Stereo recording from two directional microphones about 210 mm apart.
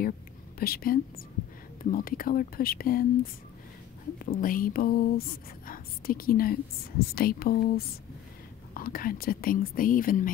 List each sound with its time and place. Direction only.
0.6 s speech: 45° left (ahead or behind)
4.2 s speech: 40° left (ahead or behind)